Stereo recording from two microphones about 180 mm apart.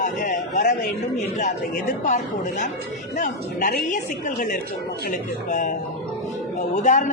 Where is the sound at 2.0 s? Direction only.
45° left (ahead or behind).